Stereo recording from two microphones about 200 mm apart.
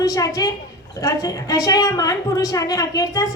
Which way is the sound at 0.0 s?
15° left (ahead or behind).